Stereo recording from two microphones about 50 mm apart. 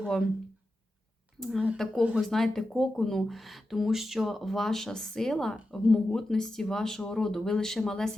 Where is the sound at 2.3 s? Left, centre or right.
Centre.